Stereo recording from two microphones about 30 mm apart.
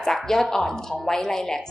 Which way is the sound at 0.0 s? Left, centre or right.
Centre.